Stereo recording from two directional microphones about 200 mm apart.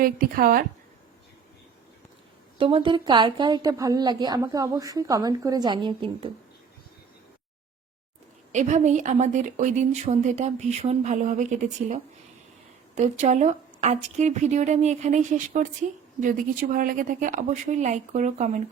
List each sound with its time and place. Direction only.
0.0 s a woman's voice: 45° right (ahead or behind)
2.6 s a woman's voice: 25° right (ahead or behind)
8.5 s a woman's voice: 35° right (ahead or behind)
13.0 s a woman's voice: 35° right (ahead or behind)